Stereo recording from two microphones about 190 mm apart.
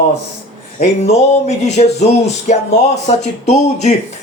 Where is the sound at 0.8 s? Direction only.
35° left (ahead or behind).